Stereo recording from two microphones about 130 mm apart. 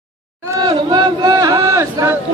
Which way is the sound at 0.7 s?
35° right (ahead or behind).